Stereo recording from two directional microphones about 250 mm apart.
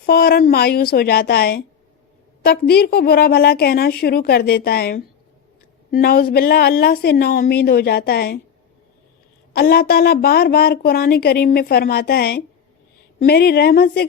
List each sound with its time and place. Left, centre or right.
0.0 s a woman's voice: left
9.5 s a woman's voice: left